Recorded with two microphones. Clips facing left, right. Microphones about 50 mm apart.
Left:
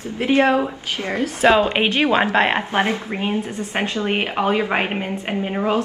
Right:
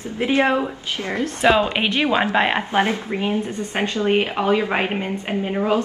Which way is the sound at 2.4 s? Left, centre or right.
Centre.